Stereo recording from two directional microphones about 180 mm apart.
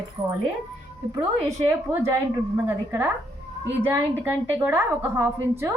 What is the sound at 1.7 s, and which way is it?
A woman's voice, 15° right (ahead or behind).